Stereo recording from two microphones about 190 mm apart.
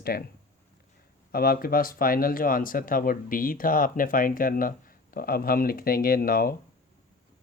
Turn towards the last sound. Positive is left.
turn(degrees=50)  # may be behind; listen again after turning